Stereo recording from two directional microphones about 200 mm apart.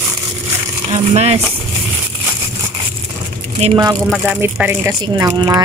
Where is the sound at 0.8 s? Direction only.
30° right (ahead or behind).